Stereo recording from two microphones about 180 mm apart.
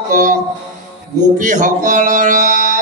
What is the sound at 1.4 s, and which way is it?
Speech, 45° right (ahead or behind).